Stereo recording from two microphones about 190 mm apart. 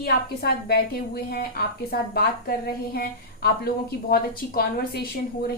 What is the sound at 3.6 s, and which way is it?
A woman's voice, 50° left (ahead or behind).